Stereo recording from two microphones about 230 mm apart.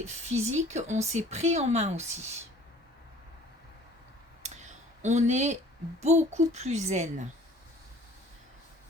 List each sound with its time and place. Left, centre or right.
0.0 s speech: right
4.4 s a sound: right
6.0 s a woman's voice: right